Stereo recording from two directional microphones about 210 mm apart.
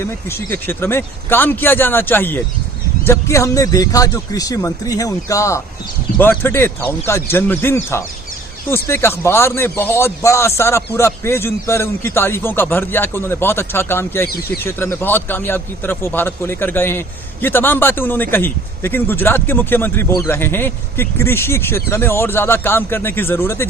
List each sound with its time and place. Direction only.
0.0 s a man's voice: 10° left (ahead or behind)